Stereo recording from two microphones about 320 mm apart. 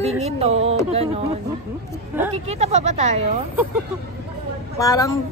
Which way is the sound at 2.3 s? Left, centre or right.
Centre.